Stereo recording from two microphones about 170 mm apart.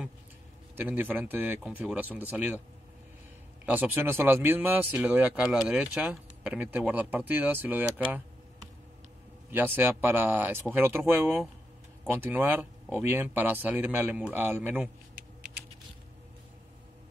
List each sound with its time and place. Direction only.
0.7 s speech: 10° right (ahead or behind)
3.6 s speech: 10° right (ahead or behind)
9.5 s speech: 10° right (ahead or behind)